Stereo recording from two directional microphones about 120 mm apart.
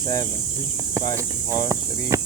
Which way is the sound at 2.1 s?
25° right (ahead or behind).